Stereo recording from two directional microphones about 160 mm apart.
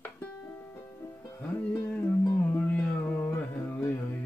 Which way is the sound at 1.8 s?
10° left (ahead or behind).